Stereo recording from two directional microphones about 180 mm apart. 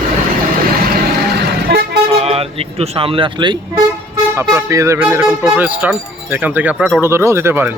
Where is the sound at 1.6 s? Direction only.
65° right (ahead or behind).